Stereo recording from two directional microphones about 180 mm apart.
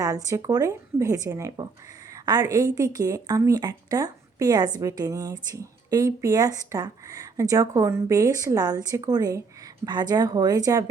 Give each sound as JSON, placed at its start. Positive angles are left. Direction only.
{"t": 0.0, "sound": "speech", "side_deg": -20}